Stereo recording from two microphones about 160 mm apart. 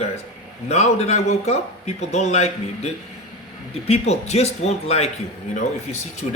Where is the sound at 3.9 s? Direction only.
40° left (ahead or behind).